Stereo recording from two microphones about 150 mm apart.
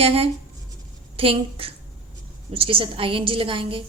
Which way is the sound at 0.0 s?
40° right (ahead or behind).